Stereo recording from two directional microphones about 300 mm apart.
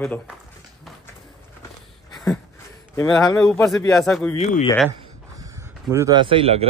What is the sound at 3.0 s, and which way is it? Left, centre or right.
A man's voice, centre.